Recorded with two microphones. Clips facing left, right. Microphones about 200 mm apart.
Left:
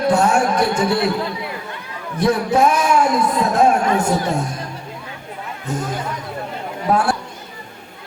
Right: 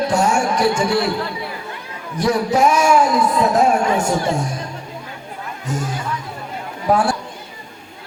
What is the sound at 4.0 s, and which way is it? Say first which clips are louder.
Speech: even; 55° left (ahead or behind).